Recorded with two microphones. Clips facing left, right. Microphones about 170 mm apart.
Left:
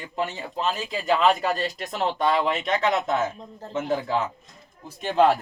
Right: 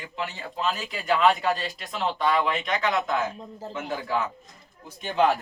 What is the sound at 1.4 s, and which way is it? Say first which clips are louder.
Speech: left 1 dB; 40° left (ahead or behind).